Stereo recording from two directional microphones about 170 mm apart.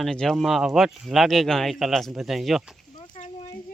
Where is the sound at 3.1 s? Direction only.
45° left (ahead or behind).